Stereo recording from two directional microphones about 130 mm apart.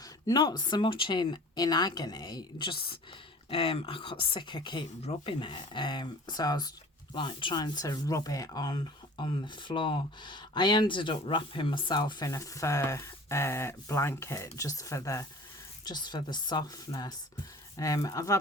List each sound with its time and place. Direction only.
0.0 s speech: 30° left (ahead or behind)
12.3 s speech: 25° left (ahead or behind)